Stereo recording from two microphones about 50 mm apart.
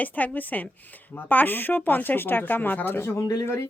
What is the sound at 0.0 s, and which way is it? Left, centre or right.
Speech, left.